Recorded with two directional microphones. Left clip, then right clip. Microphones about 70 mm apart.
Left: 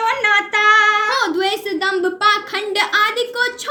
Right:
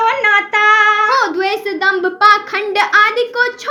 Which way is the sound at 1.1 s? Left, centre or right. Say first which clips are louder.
Right 4 dB; centre.